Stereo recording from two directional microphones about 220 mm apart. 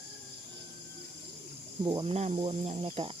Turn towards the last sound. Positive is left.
turn(degrees=-25)  # may be behind; listen again after turning